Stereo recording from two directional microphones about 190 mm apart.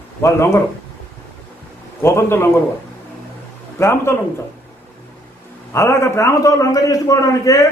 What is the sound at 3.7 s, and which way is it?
Speech, 15° left (ahead or behind).